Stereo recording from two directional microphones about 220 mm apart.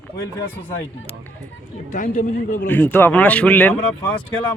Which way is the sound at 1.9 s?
35° left (ahead or behind).